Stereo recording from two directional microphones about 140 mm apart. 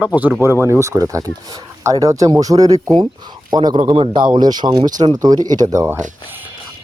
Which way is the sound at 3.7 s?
40° right (ahead or behind).